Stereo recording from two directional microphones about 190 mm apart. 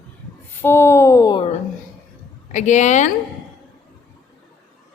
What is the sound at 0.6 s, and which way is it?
Speech, 15° left (ahead or behind).